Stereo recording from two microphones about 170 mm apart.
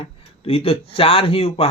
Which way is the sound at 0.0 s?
35° left (ahead or behind).